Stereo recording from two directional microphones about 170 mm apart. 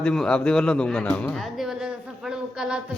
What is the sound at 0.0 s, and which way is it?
A man's voice, 5° left (ahead or behind).